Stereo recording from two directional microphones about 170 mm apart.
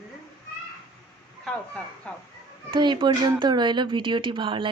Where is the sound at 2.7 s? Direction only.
30° right (ahead or behind).